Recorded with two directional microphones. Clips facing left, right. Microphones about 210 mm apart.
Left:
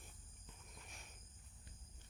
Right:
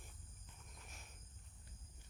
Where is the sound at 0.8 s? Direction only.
Centre (ahead or behind).